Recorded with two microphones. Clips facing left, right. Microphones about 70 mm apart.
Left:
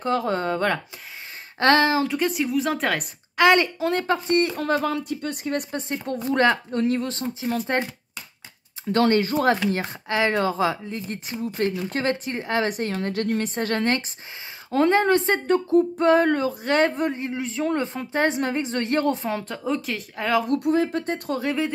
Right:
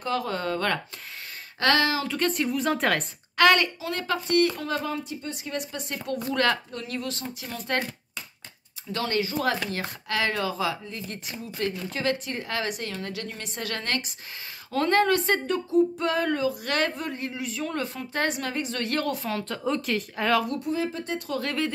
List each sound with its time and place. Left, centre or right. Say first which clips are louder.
0.0 s a woman's voice: left 5 dB; left
2.0 s a woman's voice: left 2 dB; centre
3.3 s speech: left 2 dB; centre
3.9 s a woman's voice: left 3 dB; left
4.6 s speech: left 6 dB; left
4.8 s speech: left 6 dB; left
6.2 s a woman's voice: left 5 dB; left
7.6 s speech: right 1 dB; left
8.9 s speech: left 8 dB; left
9.7 s a woman's voice: left 6 dB; left
15.4 s a woman's voice: left 4 dB; left
16.6 s speech: left 7 dB; left; by 20.4 s centre
20.5 s speech: left 7 dB; left
21.4 s speech: left 2 dB; centre